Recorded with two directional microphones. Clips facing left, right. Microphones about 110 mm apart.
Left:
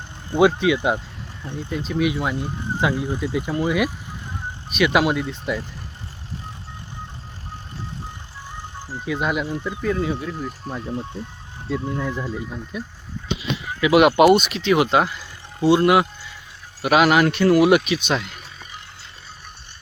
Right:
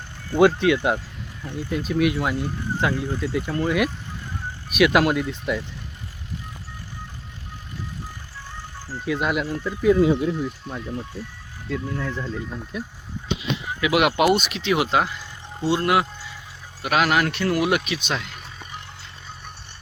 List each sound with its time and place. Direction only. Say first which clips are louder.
0.3 s speech: even; 5° left (ahead or behind)
2.4 s speech: left 1 dB; 15° left (ahead or behind)
4.7 s speech: right 1 dB; 5° right (ahead or behind)
8.5 s music: left 2 dB; 15° left (ahead or behind)
9.0 s speech: even; centre (ahead or behind)
9.8 s speech: right 7 dB; 20° right (ahead or behind)
10.8 s speech: left 4 dB; 25° left (ahead or behind); by 18.2 s 5° left (ahead or behind)